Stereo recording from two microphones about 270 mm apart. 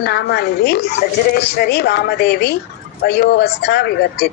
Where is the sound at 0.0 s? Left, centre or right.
Left.